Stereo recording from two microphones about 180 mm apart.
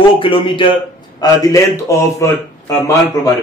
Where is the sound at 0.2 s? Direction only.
30° left (ahead or behind).